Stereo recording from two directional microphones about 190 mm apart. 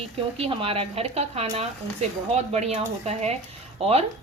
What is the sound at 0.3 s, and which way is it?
Speech, 30° right (ahead or behind).